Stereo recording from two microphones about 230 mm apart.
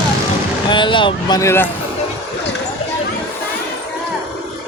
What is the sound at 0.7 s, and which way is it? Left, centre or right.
Speech, left.